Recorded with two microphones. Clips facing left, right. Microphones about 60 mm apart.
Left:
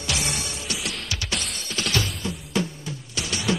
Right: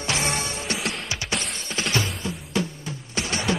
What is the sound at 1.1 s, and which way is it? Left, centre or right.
Music, right.